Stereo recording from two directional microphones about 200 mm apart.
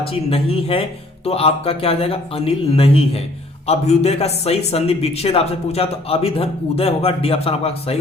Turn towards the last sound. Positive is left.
turn(degrees=30)  # may be behind; listen again after turning